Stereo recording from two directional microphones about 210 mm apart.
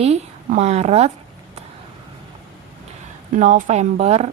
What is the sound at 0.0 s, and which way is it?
A woman's voice, 30° right (ahead or behind).